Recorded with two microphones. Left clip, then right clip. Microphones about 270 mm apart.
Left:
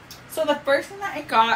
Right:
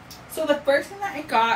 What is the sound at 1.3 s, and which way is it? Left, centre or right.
Speech, centre.